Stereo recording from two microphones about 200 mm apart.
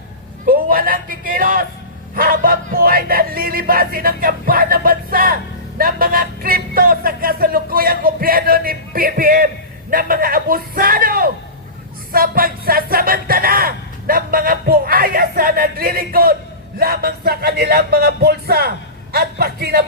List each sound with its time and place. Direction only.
0.4 s a man's voice: 45° right (ahead or behind)
2.1 s a sound: 45° right (ahead or behind)
9.9 s music: 45° right (ahead or behind)
12.1 s a sound: 45° right (ahead or behind)
16.7 s music: 50° right (ahead or behind)
19.1 s a man's voice: 50° right (ahead or behind)